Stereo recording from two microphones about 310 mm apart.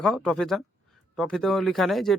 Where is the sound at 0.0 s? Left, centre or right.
Centre.